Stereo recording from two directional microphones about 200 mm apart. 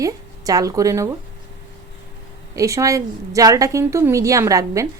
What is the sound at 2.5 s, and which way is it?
A woman's voice, 15° right (ahead or behind).